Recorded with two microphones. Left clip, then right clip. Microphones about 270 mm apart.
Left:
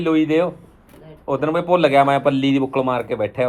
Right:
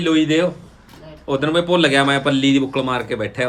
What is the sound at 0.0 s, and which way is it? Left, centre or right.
Speech, centre.